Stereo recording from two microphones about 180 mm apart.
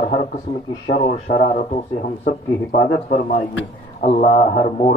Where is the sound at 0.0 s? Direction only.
40° left (ahead or behind).